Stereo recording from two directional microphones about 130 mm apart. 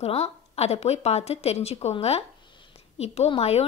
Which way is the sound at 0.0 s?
55° left (ahead or behind).